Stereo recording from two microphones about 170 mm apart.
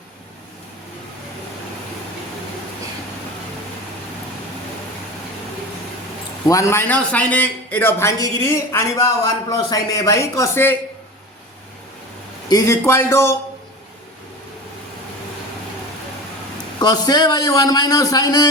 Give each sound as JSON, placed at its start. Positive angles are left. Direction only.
{"t": 6.5, "sound": "a man's voice", "side_deg": 15}
{"t": 12.5, "sound": "a man's voice", "side_deg": 20}
{"t": 16.8, "sound": "a man's voice", "side_deg": 25}